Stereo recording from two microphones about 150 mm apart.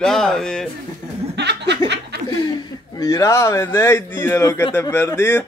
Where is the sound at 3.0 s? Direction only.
20° left (ahead or behind).